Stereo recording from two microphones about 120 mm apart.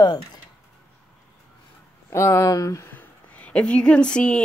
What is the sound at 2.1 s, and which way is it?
Speech, 25° left (ahead or behind).